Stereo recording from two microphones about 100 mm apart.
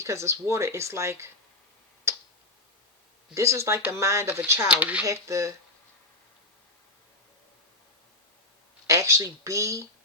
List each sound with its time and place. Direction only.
0.0 s speech: 30° right (ahead or behind)
3.3 s speech: 30° right (ahead or behind)
4.7 s speech: 15° right (ahead or behind)
5.0 s speech: 30° right (ahead or behind)
8.9 s speech: 30° right (ahead or behind)